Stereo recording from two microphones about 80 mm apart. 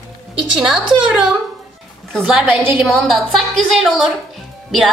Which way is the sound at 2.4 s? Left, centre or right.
Right.